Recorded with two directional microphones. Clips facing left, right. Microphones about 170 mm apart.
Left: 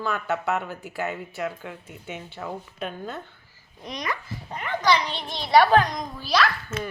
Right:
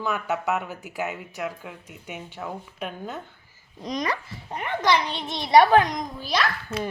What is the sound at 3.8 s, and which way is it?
Speech, 40° right (ahead or behind).